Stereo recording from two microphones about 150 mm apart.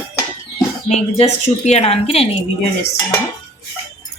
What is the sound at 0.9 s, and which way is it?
Speech, 45° left (ahead or behind).